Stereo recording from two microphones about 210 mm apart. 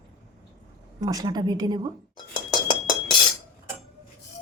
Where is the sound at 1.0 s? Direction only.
15° right (ahead or behind).